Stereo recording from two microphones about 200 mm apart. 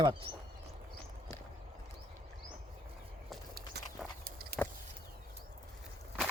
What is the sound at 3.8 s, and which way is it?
Walk, 55° right (ahead or behind).